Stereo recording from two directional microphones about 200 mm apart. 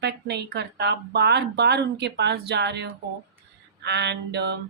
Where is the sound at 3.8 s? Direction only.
60° right (ahead or behind).